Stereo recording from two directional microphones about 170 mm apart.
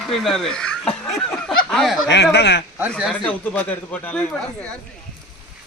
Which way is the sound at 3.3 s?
10° left (ahead or behind).